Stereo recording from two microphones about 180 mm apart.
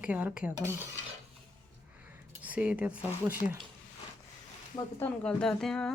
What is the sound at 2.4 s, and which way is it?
Speech, 5° right (ahead or behind).